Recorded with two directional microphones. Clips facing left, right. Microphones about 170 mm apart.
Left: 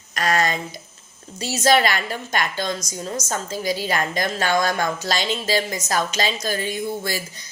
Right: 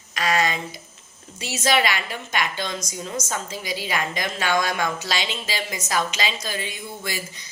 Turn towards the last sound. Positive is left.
turn(degrees=40)  # may be behind; listen again after turning